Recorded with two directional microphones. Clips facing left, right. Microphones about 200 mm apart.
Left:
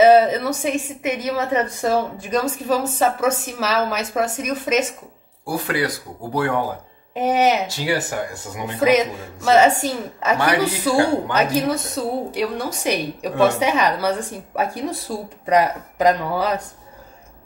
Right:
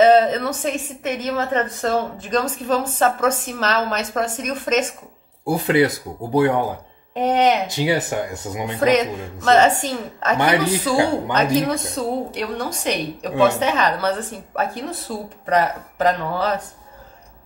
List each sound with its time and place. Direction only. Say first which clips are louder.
0.0 s a woman's voice: left 1 dB; 10° left (ahead or behind)
5.4 s speech: right 6 dB; 20° right (ahead or behind)
7.2 s a woman's voice: even; 5° left (ahead or behind)
7.6 s speech: right 2 dB; 20° right (ahead or behind)
8.7 s a woman's voice: left 1 dB; 10° left (ahead or behind)